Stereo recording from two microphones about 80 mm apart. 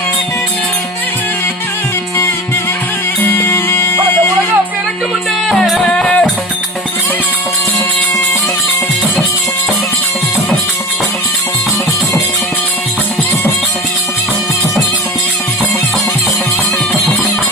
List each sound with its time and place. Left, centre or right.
3.4 s music: left
5.5 s music: centre
6.0 s music: centre